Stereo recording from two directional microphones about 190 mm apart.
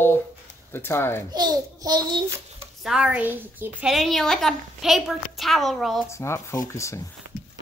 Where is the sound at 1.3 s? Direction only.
20° right (ahead or behind).